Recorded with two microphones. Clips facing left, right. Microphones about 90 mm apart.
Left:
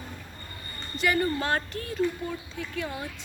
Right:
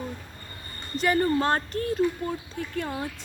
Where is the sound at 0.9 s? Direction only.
40° right (ahead or behind).